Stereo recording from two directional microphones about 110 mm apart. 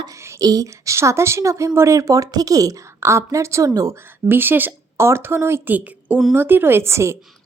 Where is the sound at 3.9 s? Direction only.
20° right (ahead or behind).